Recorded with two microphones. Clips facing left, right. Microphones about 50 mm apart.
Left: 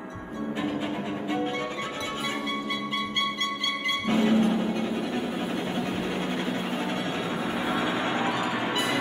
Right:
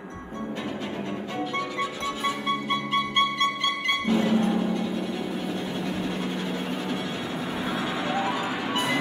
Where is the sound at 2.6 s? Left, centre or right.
Right.